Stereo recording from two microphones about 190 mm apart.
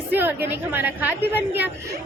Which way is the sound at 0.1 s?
10° right (ahead or behind).